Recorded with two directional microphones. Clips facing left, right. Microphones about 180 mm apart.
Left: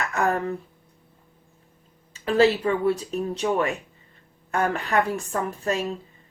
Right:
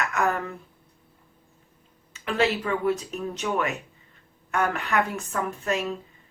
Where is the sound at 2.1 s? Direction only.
30° left (ahead or behind).